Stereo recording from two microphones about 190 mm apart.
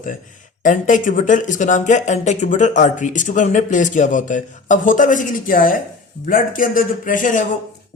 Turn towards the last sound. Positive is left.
turn(degrees=45)  # may be behind; listen again after turning